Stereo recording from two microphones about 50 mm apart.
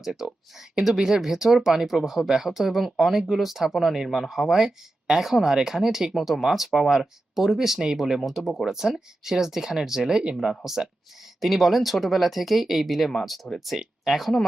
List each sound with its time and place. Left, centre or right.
0.0 s speech: centre